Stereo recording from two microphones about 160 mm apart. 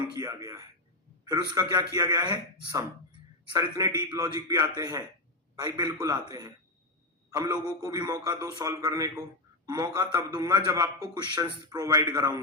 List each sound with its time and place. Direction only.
0.2 s a man's voice: 25° right (ahead or behind)
1.7 s a man's voice: 25° right (ahead or behind)